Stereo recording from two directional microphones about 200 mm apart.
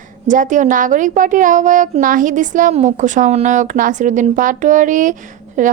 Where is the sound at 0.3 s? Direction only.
40° right (ahead or behind).